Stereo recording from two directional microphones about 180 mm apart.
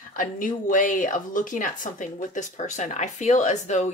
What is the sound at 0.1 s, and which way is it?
Speech, 50° left (ahead or behind).